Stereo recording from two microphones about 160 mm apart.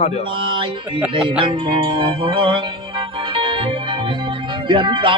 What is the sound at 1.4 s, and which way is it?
Music, 30° right (ahead or behind).